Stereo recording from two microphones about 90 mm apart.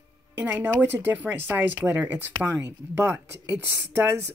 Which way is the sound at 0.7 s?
20° right (ahead or behind).